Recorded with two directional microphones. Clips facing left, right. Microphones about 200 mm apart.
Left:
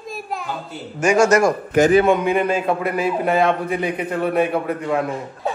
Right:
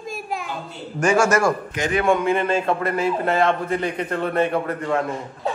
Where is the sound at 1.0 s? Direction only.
15° left (ahead or behind).